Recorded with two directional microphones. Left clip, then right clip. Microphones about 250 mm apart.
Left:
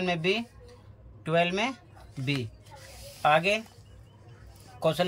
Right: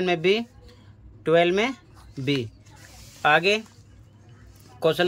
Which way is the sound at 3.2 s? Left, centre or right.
Centre.